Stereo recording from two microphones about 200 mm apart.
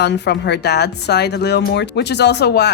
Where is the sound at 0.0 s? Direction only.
55° left (ahead or behind).